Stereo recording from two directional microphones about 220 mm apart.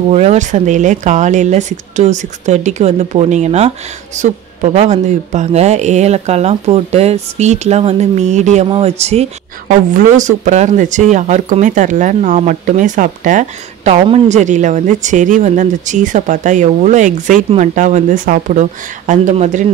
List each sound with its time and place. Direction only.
0.1 s speech: 30° right (ahead or behind)